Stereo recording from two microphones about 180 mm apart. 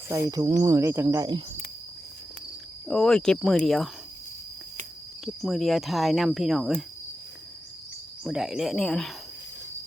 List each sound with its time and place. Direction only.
0.1 s speech: 20° right (ahead or behind)
2.8 s cricket: 5° left (ahead or behind)
5.2 s cricket: centre (ahead or behind)
8.2 s cricket: 5° right (ahead or behind)